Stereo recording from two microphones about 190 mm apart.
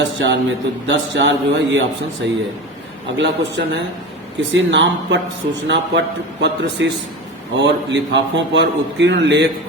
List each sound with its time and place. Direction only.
0.0 s a man's voice: 70° right (ahead or behind)